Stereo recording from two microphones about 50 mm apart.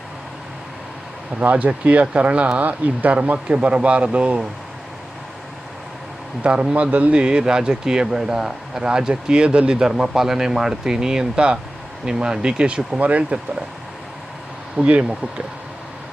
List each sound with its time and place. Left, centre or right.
1.4 s speech: right
6.4 s speech: right
14.8 s speech: right